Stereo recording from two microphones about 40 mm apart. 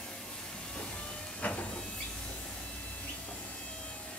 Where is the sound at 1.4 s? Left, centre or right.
Left.